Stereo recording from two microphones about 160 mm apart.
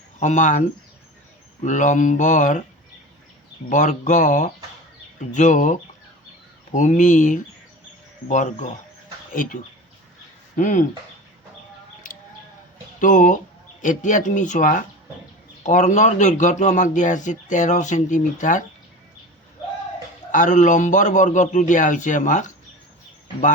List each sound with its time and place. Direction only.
0.2 s speech: 50° left (ahead or behind)
1.6 s speech: 50° left (ahead or behind)
3.7 s speech: 50° left (ahead or behind)
13.0 s speech: 55° left (ahead or behind)
20.3 s speech: 50° left (ahead or behind)